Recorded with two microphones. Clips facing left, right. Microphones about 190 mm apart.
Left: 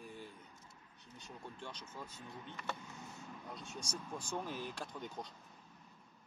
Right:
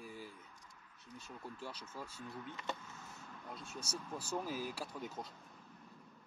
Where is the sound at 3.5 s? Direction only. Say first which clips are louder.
Right 1 dB; 5° right (ahead or behind).